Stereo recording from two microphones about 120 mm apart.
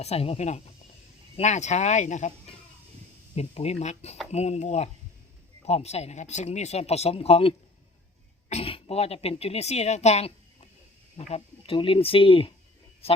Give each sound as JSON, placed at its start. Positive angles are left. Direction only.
{"t": 0.0, "sound": "speech", "side_deg": 60}
{"t": 3.3, "sound": "speech", "side_deg": 60}